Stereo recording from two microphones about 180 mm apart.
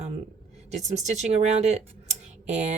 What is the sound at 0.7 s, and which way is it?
Speech, 40° right (ahead or behind).